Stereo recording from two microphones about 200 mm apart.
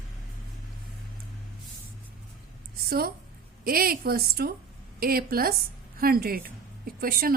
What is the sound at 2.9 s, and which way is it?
A woman's voice, 50° right (ahead or behind).